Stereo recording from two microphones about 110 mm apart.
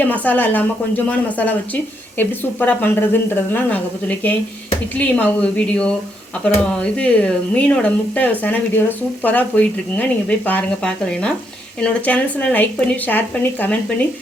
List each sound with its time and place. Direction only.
0.0 s speech: 15° left (ahead or behind)